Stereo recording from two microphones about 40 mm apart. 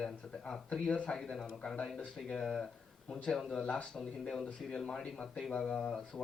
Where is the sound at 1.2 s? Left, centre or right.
Centre.